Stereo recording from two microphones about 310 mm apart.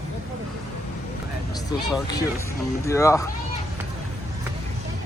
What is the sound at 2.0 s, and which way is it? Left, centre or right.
Speech, centre.